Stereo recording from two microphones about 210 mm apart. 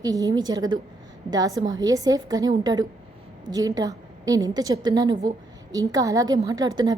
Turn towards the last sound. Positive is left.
turn(degrees=-20)  # may be behind; listen again after turning